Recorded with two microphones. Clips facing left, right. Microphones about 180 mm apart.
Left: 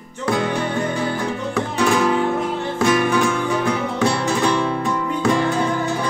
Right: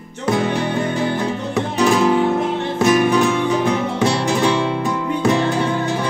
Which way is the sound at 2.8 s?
20° right (ahead or behind).